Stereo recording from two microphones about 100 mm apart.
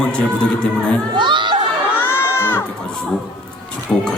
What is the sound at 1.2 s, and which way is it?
Crowd, 50° right (ahead or behind).